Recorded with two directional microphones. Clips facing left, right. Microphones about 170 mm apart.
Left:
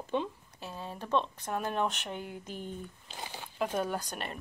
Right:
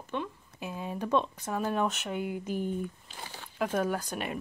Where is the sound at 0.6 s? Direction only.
15° right (ahead or behind).